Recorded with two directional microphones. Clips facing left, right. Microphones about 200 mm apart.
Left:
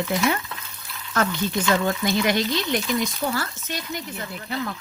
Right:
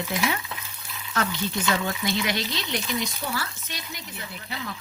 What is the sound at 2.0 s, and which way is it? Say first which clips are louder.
Speech: left 5 dB; 50° left (ahead or behind).